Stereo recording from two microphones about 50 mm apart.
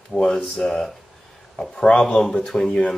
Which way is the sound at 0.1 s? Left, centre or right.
Centre.